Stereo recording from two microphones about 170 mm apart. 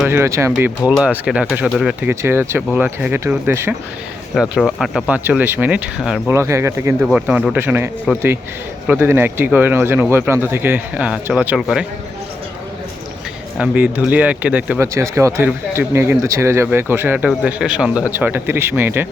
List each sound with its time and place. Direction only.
0.1 s speech: 15° right (ahead or behind)
4.4 s speech: centre (ahead or behind)
6.2 s speech: 15° right (ahead or behind)
13.6 s speech: 10° right (ahead or behind)